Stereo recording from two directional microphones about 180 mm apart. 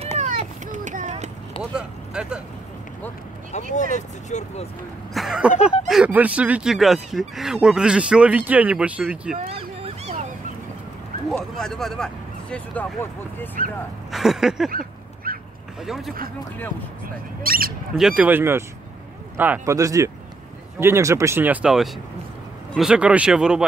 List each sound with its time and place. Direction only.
0.2 s a sound: 40° right (ahead or behind)
1.6 s speech: 5° right (ahead or behind)
3.9 s speech: 40° left (ahead or behind)
5.1 s speech: centre (ahead or behind)
9.5 s a sound: 35° right (ahead or behind)
11.2 s speech: centre (ahead or behind)
14.1 s speech: centre (ahead or behind)
14.7 s a sound: 55° right (ahead or behind)
15.8 s speech: centre (ahead or behind)
17.4 s speech: 55° right (ahead or behind)
17.9 s speech: 5° right (ahead or behind)